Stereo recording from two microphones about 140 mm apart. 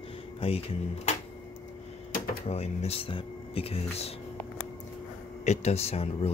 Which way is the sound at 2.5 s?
50° left (ahead or behind).